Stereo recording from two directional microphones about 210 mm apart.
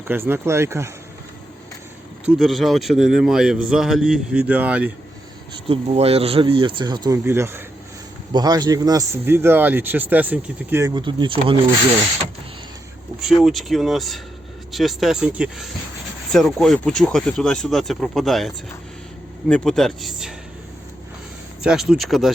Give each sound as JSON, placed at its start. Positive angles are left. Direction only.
{"t": 0.1, "sound": "a man's voice", "side_deg": -10}
{"t": 2.2, "sound": "a man's voice", "side_deg": 0}
{"t": 5.6, "sound": "a man's voice", "side_deg": -30}
{"t": 13.2, "sound": "a man's voice", "side_deg": 0}
{"t": 21.6, "sound": "a man's voice", "side_deg": -5}